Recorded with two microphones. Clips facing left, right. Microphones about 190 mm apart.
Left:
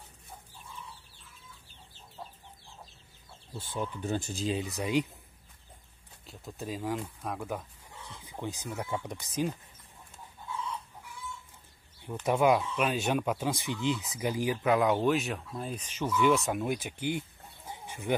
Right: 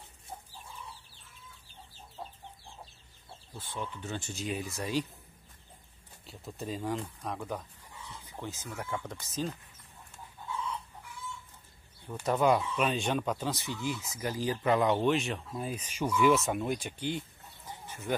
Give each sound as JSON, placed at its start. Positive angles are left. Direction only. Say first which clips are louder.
{"t": 3.7, "sound": "speech", "louder": "left 5 dB", "side_deg": 40}
{"t": 6.2, "sound": "speech", "louder": "even", "side_deg": 0}
{"t": 8.3, "sound": "speech", "louder": "left 4 dB", "side_deg": 15}
{"t": 12.3, "sound": "speech", "louder": "left 1 dB", "side_deg": 10}
{"t": 14.6, "sound": "speech", "louder": "even", "side_deg": 0}
{"t": 17.6, "sound": "chicken", "louder": "left 3 dB", "side_deg": 15}